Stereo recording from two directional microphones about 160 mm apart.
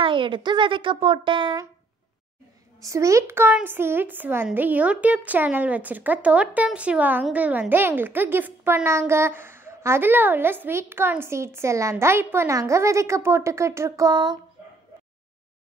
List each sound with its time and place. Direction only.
0.0 s speech: 30° right (ahead or behind)
2.8 s a child's voice: 20° right (ahead or behind)